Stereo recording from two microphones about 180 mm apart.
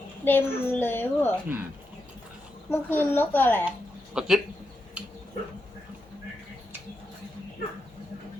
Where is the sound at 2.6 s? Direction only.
10° left (ahead or behind).